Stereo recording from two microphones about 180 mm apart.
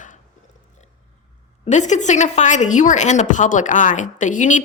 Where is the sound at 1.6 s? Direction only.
40° left (ahead or behind).